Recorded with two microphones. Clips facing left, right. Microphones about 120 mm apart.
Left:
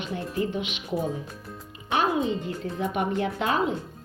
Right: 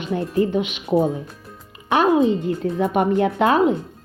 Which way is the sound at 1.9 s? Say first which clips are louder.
Right 8 dB; 65° right (ahead or behind).